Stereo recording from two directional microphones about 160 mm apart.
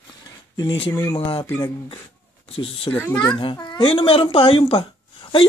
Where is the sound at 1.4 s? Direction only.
15° left (ahead or behind).